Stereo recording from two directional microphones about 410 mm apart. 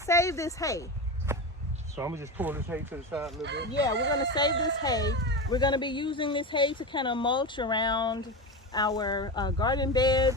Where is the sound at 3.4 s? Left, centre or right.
Right.